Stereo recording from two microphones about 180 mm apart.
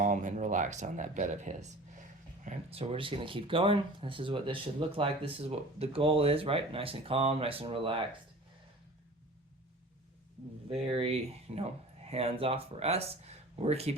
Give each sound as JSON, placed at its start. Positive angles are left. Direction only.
{"t": 0.0, "sound": "speech", "side_deg": -45}
{"t": 10.7, "sound": "speech", "side_deg": -30}